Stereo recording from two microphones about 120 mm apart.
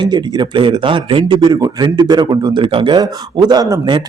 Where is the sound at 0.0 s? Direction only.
40° right (ahead or behind).